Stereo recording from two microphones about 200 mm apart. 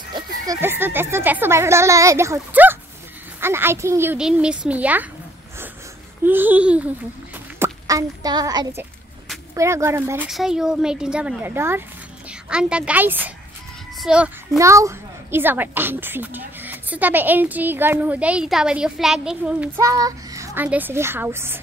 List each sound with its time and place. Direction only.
0.1 s a child's voice: 15° right (ahead or behind)
6.2 s a child's voice: 10° right (ahead or behind)
19.8 s a child's voice: 15° right (ahead or behind)